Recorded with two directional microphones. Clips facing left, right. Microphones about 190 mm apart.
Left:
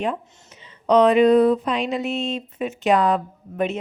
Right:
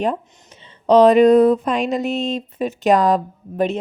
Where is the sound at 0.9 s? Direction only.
35° right (ahead or behind).